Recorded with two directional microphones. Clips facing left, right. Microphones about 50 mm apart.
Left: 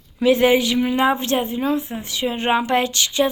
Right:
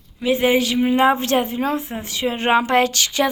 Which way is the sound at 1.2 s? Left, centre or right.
Right.